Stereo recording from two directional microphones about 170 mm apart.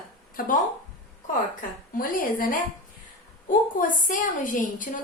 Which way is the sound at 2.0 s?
55° left (ahead or behind).